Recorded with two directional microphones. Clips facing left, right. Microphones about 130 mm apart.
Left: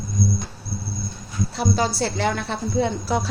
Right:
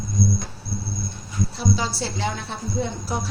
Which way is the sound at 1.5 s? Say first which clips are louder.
Left 4 dB; 55° left (ahead or behind).